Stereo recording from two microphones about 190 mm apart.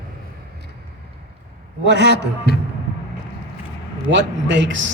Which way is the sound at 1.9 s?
65° right (ahead or behind).